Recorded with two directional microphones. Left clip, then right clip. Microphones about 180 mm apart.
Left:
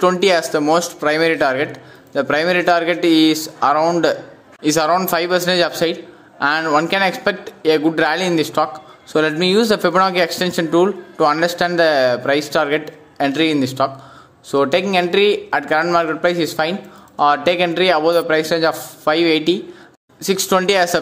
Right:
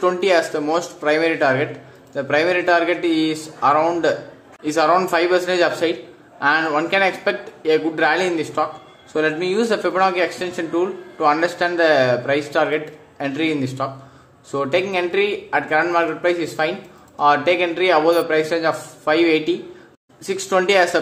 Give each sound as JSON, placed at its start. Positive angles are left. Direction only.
{"t": 0.0, "sound": "speech", "side_deg": 30}